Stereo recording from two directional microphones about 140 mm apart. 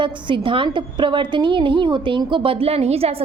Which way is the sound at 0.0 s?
35° right (ahead or behind).